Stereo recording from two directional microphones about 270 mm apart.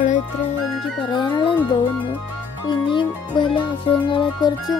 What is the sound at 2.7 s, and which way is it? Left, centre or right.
Speech, centre.